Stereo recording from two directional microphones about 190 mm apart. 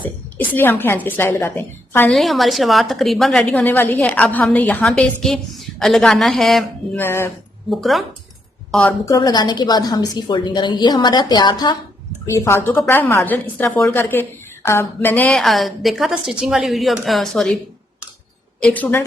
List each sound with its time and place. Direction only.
0.0 s a woman's voice: 10° left (ahead or behind)
7.7 s a woman's voice: centre (ahead or behind)
18.6 s a woman's voice: 10° left (ahead or behind)